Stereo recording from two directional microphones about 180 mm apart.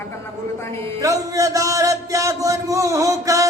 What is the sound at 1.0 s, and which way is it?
A man's voice, 20° right (ahead or behind).